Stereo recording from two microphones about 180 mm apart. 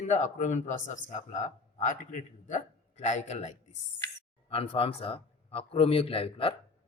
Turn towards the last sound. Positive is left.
turn(degrees=30)  # may be behind; listen again after turning